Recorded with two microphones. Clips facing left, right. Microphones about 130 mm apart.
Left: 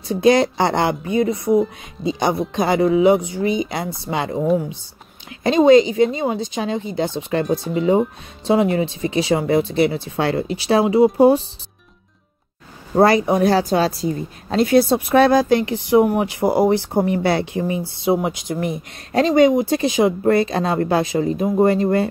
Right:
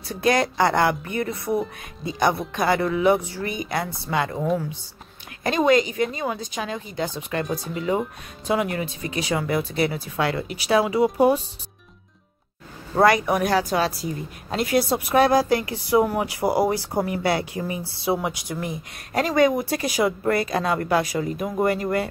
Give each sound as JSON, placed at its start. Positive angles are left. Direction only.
{"t": 0.1, "sound": "a woman's voice", "side_deg": 25}
{"t": 13.0, "sound": "a woman's voice", "side_deg": 30}